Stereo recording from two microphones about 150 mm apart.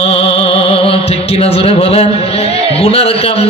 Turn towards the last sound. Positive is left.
turn(degrees=40)  # may be behind; listen again after turning